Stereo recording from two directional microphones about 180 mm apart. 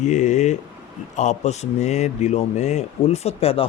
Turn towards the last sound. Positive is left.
turn(degrees=35)  # may be behind; listen again after turning